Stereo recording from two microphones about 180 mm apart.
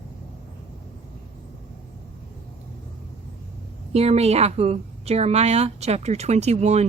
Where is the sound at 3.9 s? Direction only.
35° right (ahead or behind).